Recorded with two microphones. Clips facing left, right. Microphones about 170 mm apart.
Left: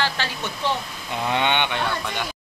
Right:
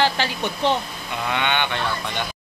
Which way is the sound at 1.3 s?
25° left (ahead or behind).